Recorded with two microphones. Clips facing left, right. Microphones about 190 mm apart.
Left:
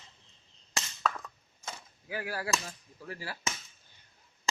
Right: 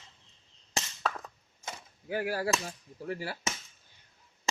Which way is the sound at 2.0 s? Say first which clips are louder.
Right 4 dB; 30° right (ahead or behind).